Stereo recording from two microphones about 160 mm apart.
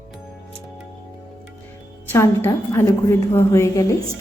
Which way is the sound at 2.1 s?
15° left (ahead or behind).